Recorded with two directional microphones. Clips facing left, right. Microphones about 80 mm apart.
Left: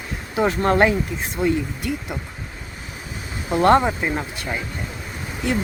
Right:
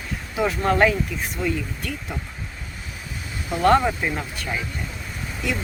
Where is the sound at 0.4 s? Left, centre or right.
Left.